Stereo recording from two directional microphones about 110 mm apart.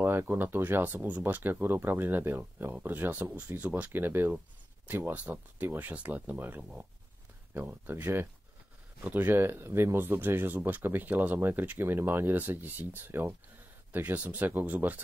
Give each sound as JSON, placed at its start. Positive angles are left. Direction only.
{"t": 0.0, "sound": "speech", "side_deg": -20}